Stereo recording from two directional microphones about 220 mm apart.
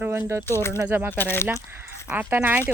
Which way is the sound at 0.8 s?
10° right (ahead or behind).